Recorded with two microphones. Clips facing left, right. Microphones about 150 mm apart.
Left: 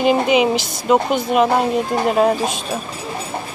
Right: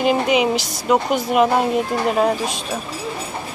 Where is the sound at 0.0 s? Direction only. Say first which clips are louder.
Left 2 dB; centre (ahead or behind).